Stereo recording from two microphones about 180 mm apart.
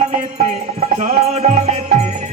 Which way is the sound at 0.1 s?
40° right (ahead or behind).